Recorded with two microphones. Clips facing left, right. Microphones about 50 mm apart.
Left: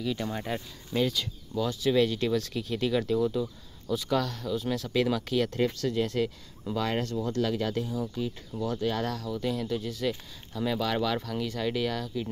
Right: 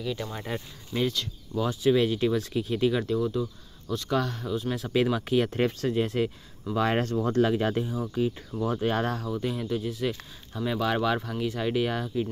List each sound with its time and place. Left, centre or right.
0.0 s speech: centre
0.9 s speech: centre
6.9 s speech: right
9.4 s speech: centre